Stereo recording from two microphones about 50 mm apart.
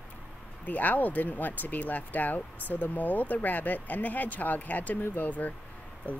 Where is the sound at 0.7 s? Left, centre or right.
Left.